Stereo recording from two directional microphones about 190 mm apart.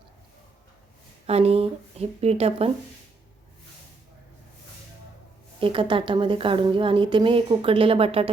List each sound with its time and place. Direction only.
1.3 s a woman's voice: 30° right (ahead or behind)
5.5 s a woman's voice: 25° right (ahead or behind)